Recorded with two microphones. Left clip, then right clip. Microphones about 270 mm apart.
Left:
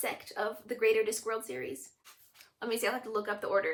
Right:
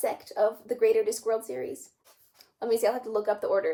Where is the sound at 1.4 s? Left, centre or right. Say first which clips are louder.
Right 5 dB; centre.